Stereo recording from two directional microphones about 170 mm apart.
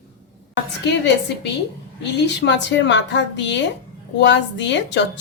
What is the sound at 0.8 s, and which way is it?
Speech, 90° left.